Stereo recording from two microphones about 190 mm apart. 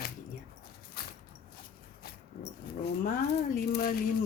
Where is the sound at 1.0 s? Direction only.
55° left (ahead or behind).